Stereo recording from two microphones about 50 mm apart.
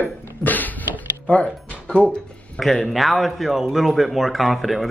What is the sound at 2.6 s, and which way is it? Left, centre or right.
Speech, centre.